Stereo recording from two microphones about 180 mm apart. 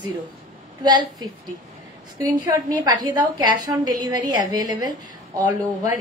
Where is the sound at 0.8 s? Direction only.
25° right (ahead or behind).